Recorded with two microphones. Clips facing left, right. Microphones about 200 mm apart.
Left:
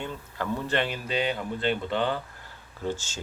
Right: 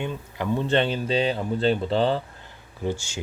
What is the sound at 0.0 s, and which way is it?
Speech, 15° right (ahead or behind).